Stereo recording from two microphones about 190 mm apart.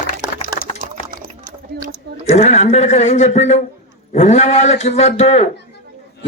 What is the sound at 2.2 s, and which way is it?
A man's voice, 35° left (ahead or behind).